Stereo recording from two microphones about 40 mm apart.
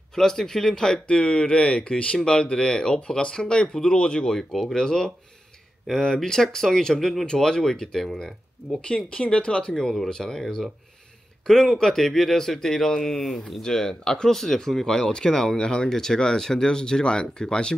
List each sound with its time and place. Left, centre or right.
0.1 s speech: centre
4.4 s speech: centre
8.8 s speech: left